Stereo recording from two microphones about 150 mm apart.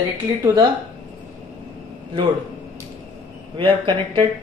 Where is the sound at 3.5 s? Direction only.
30° right (ahead or behind).